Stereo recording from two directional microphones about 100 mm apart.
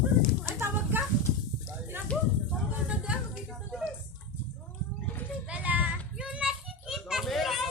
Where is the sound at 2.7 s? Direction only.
10° right (ahead or behind).